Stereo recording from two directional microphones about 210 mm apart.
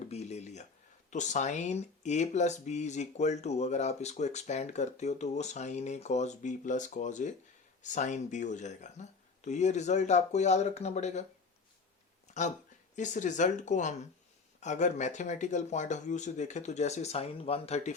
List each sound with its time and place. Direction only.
0.0 s a sound: 30° left (ahead or behind)
1.1 s speech: 35° left (ahead or behind)
12.4 s speech: 35° left (ahead or behind)